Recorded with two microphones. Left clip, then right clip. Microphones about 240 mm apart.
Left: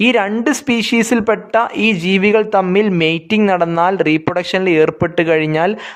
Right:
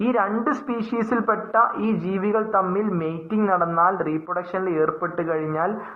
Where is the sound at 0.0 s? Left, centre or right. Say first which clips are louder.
Left 8 dB; left.